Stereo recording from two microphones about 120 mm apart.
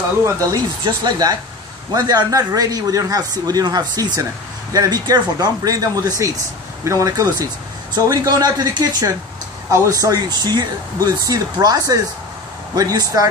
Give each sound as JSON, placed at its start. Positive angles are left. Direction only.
{"t": 0.2, "sound": "speech", "side_deg": -30}